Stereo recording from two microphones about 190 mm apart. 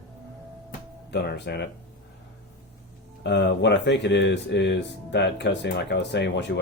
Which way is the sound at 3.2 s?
65° left (ahead or behind).